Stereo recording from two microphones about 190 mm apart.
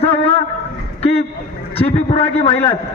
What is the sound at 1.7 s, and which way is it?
Speech, 30° left (ahead or behind).